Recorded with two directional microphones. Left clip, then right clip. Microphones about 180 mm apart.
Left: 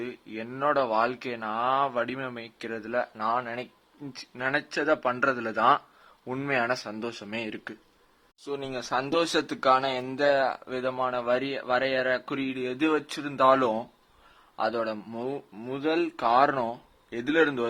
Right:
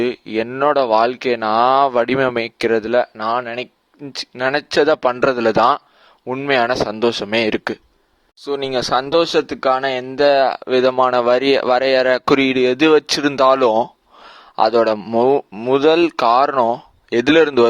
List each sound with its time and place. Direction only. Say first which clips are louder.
0.0 s speech: right 17 dB; 65° right (ahead or behind); by 3.7 s 40° right (ahead or behind)
4.4 s speech: right 12 dB; 55° right (ahead or behind)
6.2 s speech: right 10 dB; 35° right (ahead or behind)
6.5 s speech: right 12 dB; 50° right (ahead or behind)
7.3 s speech: right 17 dB; 70° right (ahead or behind)
8.4 s speech: right 13 dB; 45° right (ahead or behind)
15.8 s speech: right 12 dB; 60° right (ahead or behind)